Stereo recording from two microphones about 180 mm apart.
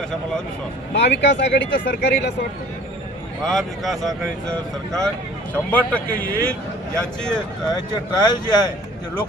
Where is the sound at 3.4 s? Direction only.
Centre (ahead or behind).